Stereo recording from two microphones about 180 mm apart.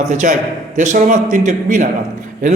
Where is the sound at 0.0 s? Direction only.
40° right (ahead or behind).